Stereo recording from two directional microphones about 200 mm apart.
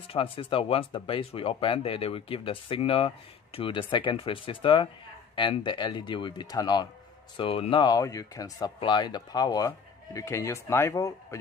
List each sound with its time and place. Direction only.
0.1 s speech: 25° left (ahead or behind)